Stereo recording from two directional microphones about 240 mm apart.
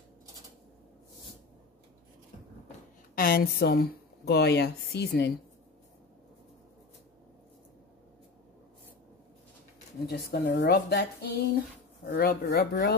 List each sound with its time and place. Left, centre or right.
3.2 s speech: left
10.0 s a woman's voice: left